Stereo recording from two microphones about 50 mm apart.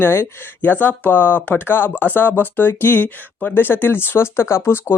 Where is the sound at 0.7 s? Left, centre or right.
Left.